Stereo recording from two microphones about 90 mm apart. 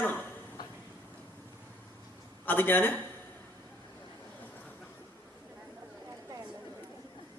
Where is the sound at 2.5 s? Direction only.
20° left (ahead or behind).